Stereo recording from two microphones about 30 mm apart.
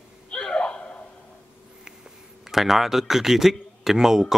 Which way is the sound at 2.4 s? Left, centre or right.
Centre.